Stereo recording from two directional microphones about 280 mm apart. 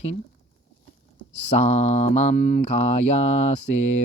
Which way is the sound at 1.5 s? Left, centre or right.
Left.